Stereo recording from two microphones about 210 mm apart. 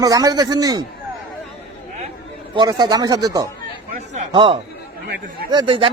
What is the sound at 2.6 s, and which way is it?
Speech, 20° right (ahead or behind).